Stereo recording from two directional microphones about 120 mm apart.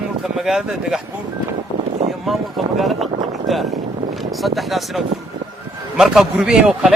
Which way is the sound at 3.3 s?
Centre (ahead or behind).